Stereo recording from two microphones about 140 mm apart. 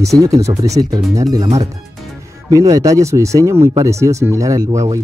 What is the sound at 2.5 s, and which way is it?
Speech, 25° right (ahead or behind).